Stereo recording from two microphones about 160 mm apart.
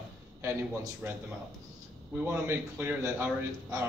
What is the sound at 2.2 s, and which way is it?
Speech, 15° right (ahead or behind).